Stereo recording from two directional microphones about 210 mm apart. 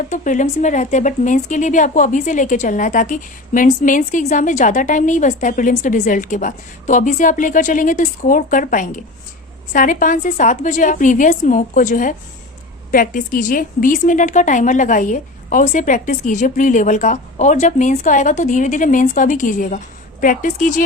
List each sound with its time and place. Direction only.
0.1 s speech: 35° left (ahead or behind)